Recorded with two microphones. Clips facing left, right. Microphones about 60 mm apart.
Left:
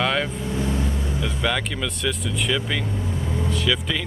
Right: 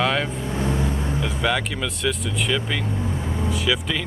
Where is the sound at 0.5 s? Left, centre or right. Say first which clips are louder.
Right 2 dB; right.